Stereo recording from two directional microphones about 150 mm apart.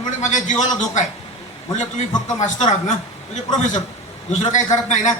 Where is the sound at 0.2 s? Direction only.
55° left (ahead or behind).